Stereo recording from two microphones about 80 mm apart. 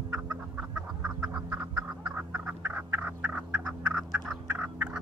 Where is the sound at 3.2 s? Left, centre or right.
Centre.